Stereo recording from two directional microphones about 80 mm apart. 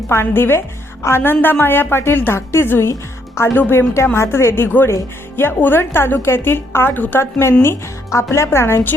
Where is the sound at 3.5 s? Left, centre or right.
Left.